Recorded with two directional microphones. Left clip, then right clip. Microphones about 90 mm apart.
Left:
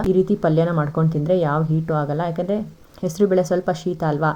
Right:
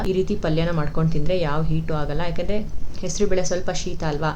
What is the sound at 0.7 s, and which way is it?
Speech, 40° left (ahead or behind).